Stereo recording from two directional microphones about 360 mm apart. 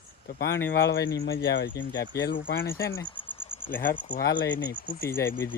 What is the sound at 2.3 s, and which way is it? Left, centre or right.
Cricket, centre.